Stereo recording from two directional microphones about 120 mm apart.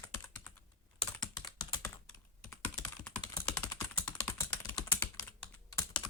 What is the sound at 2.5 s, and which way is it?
Computer keyboard, 10° left (ahead or behind).